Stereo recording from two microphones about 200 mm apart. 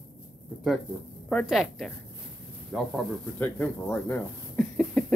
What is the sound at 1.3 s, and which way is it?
A woman's voice, centre (ahead or behind).